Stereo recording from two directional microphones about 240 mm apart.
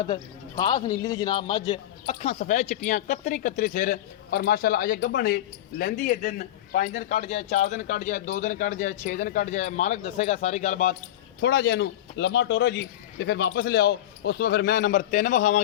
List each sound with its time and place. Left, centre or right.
0.5 s a man's voice: centre
11.3 s speech: left